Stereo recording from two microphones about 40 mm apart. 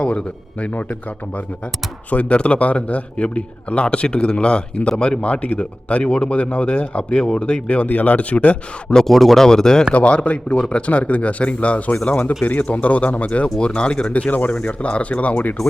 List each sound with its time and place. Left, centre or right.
0.6 s speech: left
2.0 s speech: left
6.3 s speech: left
9.0 s speech: centre
9.9 s speech: left
14.3 s speech: left